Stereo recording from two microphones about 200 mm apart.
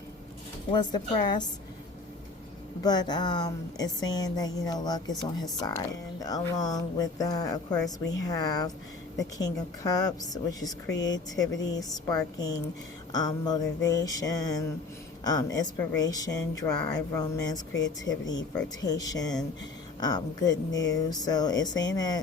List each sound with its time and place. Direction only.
0.7 s speech: 20° left (ahead or behind)
2.8 s speech: 20° left (ahead or behind)
6.1 s speech: 15° left (ahead or behind)
17.7 s speech: 65° left (ahead or behind)
18.8 s speech: 20° left (ahead or behind)